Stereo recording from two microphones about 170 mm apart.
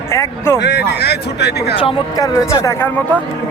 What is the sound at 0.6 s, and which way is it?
Speech, 85° left.